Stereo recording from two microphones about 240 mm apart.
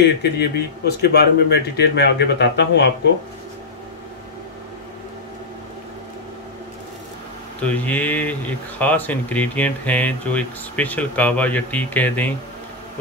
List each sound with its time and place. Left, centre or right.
0.0 s a man's voice: left
7.6 s speech: centre